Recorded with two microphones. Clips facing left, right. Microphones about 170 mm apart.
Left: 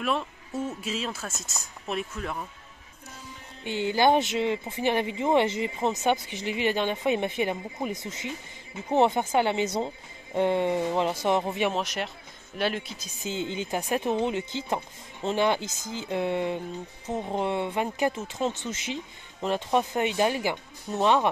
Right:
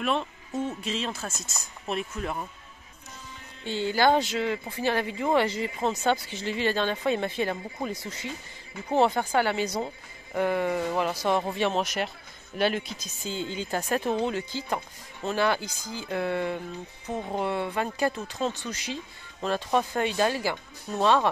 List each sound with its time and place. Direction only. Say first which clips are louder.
0.6 s speech: right 1 dB; 5° left (ahead or behind)
3.6 s speech: left 1 dB; 15° left (ahead or behind)
11.7 s speech: right 2 dB; centre (ahead or behind)
13.2 s speech: left 2 dB; 20° left (ahead or behind)